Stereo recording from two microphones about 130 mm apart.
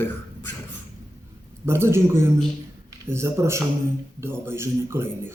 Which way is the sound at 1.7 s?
20° right (ahead or behind).